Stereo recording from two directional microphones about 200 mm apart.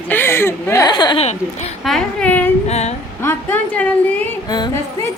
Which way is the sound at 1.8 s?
5° left (ahead or behind).